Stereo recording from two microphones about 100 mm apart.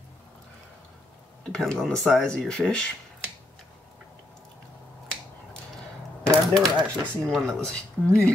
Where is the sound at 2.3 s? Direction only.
10° left (ahead or behind).